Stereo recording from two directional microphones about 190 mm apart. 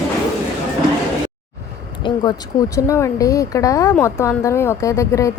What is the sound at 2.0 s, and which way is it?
Speech, 25° left (ahead or behind).